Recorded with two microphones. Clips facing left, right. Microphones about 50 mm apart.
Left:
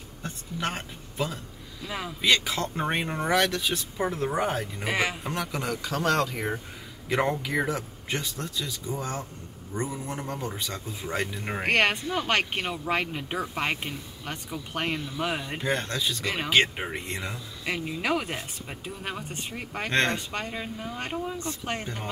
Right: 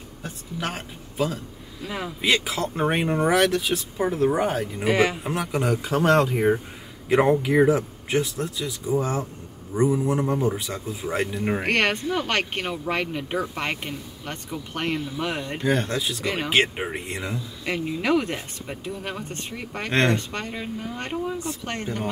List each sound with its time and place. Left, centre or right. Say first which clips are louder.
0.2 s speech: right 1 dB; centre
2.2 s speech: right 1 dB; centre
5.5 s speech: right 7 dB; right; by 15.8 s centre
15.8 s speech: right 3 dB; centre
19.9 s speech: right 4 dB; centre